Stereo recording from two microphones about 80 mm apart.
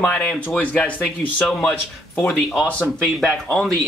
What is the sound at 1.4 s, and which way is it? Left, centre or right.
Speech, centre.